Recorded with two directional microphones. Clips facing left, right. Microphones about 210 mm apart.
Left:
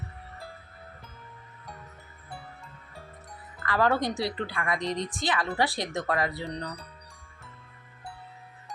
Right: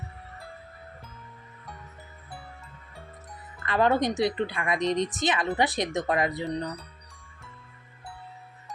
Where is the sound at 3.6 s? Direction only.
20° right (ahead or behind).